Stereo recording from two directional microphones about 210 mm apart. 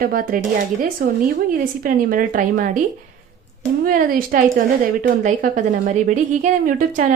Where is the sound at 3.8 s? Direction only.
40° right (ahead or behind).